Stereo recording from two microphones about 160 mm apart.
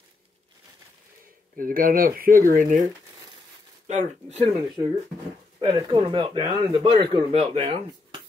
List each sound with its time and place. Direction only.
1.6 s speech: 60° right (ahead or behind)
4.8 s speech: 20° right (ahead or behind); by 8.2 s 35° right (ahead or behind)